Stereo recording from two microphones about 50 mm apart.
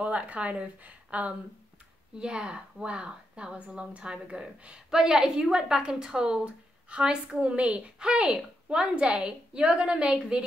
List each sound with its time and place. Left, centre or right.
0.0 s a woman's voice: right